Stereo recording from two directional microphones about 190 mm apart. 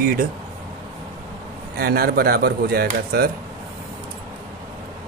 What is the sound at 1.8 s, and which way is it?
Speech, 50° right (ahead or behind).